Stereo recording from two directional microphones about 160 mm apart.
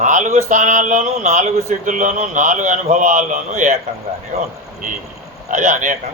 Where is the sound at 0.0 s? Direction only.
50° right (ahead or behind).